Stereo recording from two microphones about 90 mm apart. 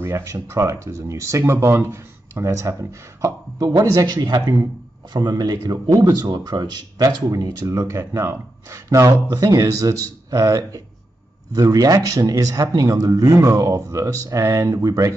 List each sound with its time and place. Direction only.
0.0 s speech: 30° right (ahead or behind)